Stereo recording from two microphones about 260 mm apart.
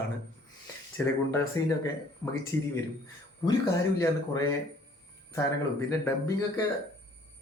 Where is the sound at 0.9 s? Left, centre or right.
Centre.